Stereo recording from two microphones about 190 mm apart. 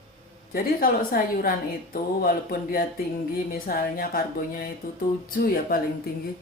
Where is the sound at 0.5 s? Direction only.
50° left (ahead or behind).